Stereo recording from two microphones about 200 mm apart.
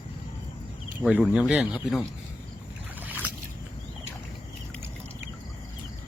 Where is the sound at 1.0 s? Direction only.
5° right (ahead or behind).